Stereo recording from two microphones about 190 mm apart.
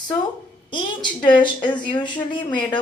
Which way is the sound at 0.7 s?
25° left (ahead or behind).